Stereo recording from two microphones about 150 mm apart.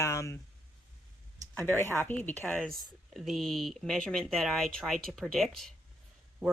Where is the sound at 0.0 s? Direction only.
20° left (ahead or behind).